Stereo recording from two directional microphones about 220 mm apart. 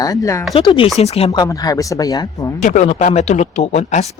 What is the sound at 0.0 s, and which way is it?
Speech, 15° left (ahead or behind).